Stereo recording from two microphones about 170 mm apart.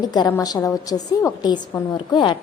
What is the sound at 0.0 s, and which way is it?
A woman's voice, 25° left (ahead or behind).